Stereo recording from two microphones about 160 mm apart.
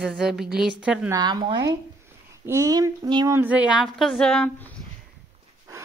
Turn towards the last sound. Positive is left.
turn(degrees=5)  # may be behind; listen again after turning